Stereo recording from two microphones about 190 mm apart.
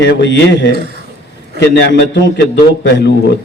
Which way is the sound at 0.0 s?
65° left (ahead or behind).